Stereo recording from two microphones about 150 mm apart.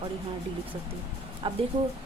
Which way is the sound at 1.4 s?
35° right (ahead or behind).